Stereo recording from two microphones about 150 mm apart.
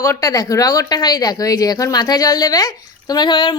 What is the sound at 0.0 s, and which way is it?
Speech, 20° left (ahead or behind).